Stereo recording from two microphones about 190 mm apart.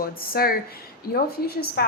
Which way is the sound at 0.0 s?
50° left (ahead or behind).